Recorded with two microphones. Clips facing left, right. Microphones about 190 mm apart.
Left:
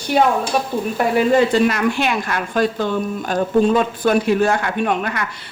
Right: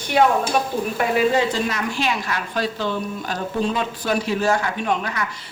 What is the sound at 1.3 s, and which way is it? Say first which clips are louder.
A woman's voice: left 6 dB; 60° left (ahead or behind).